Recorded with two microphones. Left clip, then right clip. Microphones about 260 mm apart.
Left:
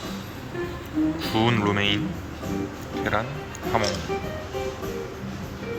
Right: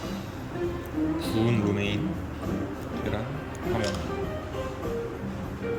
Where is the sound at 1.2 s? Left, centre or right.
Left.